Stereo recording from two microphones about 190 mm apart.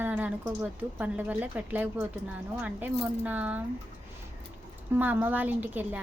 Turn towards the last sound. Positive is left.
turn(degrees=-10)  # may be behind; listen again after turning